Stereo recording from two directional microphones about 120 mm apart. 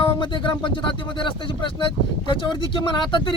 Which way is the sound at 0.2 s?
45° left (ahead or behind).